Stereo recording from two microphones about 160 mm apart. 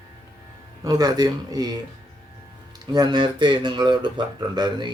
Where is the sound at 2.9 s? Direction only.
25° right (ahead or behind).